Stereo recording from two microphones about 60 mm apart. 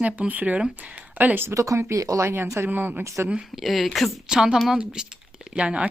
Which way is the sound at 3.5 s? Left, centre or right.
Centre.